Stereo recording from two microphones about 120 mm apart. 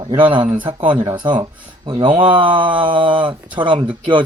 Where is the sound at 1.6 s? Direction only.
40° right (ahead or behind).